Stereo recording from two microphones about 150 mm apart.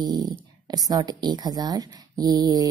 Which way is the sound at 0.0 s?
25° right (ahead or behind).